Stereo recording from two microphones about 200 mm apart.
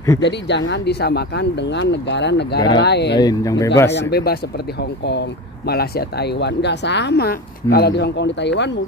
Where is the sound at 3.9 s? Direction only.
50° left (ahead or behind).